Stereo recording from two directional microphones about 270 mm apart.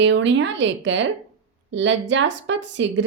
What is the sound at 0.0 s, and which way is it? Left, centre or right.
A woman's voice, right.